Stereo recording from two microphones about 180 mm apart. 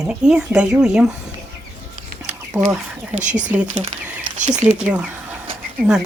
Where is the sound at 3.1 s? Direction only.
40° right (ahead or behind).